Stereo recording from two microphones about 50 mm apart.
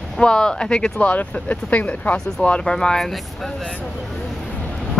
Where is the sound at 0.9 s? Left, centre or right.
Left.